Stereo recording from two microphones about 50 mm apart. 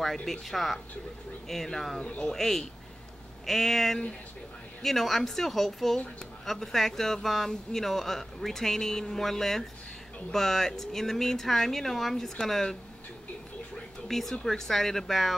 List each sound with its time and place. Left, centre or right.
0.0 s a woman's voice: centre
2.0 s speech: centre
2.2 s a woman's voice: centre
14.0 s a woman's voice: centre